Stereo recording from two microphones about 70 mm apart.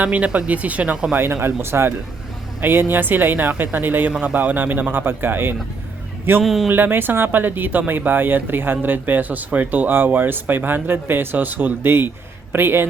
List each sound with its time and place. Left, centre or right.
0.0 s speech: right
1.1 s speech: right
6.4 s speech: centre
6.7 s speech: right